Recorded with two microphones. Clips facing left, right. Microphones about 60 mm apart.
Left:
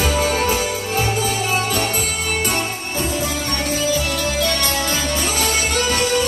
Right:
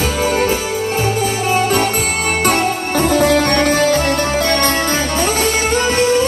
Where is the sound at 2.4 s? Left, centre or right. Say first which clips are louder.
Right 7 dB; right.